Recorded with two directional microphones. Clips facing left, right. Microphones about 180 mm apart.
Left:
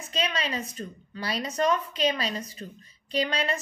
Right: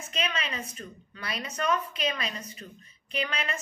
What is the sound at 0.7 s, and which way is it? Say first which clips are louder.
A woman's voice: left 6 dB; 30° left (ahead or behind).